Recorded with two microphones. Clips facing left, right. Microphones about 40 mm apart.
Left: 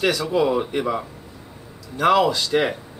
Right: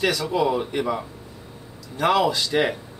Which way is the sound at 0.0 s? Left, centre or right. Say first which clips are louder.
Left 2 dB; centre.